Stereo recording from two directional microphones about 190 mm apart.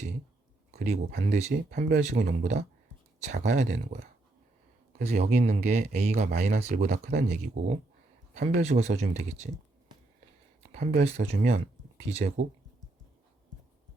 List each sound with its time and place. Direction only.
0.7 s speech: 35° right (ahead or behind)
6.9 s speech: 55° right (ahead or behind)
8.4 s speech: 35° right (ahead or behind)
10.8 s speech: 35° right (ahead or behind)